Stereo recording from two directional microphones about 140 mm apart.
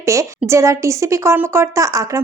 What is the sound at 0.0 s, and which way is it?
A woman's voice, 20° right (ahead or behind).